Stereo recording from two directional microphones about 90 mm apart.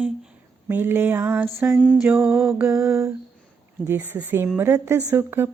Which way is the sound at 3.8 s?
20° right (ahead or behind).